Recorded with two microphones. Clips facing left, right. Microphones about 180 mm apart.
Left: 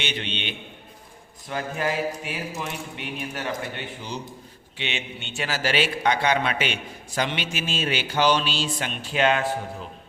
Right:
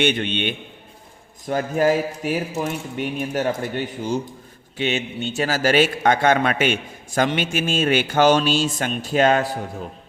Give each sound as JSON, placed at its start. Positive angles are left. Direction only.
{"t": 0.0, "sound": "a man's voice", "side_deg": -50}